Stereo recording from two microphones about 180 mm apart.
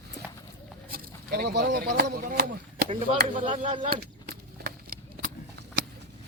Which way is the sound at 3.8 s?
55° right (ahead or behind).